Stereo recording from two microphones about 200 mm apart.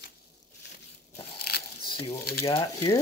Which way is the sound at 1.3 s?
50° left (ahead or behind).